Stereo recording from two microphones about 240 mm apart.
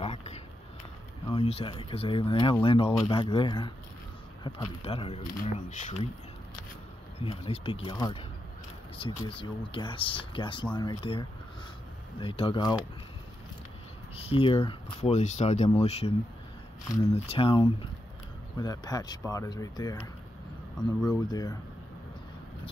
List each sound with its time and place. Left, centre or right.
0.0 s a sound: left
1.3 s speech: left
7.2 s speech: left
14.1 s speech: left
21.3 s speech: centre